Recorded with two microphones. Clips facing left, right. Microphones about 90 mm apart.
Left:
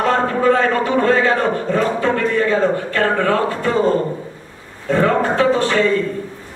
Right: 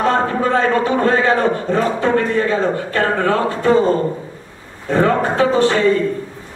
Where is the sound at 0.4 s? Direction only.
30° right (ahead or behind).